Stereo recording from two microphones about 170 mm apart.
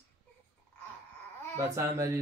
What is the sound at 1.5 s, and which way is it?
Speech, 15° right (ahead or behind).